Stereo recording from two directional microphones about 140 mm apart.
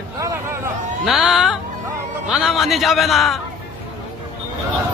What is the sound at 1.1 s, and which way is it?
A man's voice, centre (ahead or behind).